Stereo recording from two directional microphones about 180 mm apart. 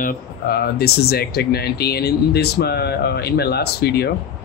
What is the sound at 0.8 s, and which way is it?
Speech, 60° left (ahead or behind).